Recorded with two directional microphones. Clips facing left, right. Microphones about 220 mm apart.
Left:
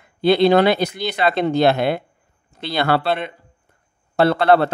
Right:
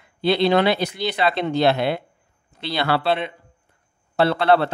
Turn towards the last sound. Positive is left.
turn(degrees=45)  # may be behind; listen again after turning